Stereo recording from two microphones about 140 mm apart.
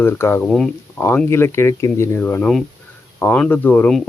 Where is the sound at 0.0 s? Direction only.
15° left (ahead or behind).